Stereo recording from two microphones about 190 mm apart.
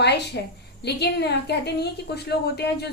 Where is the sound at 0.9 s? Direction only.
60° left (ahead or behind).